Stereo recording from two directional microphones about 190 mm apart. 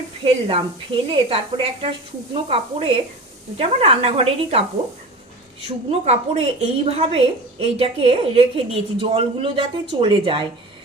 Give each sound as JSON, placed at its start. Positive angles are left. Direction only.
{"t": 0.3, "sound": "a woman's voice", "side_deg": -30}
{"t": 5.6, "sound": "a woman's voice", "side_deg": -35}